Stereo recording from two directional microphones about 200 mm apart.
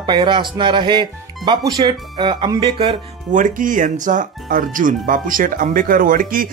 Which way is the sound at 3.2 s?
40° right (ahead or behind).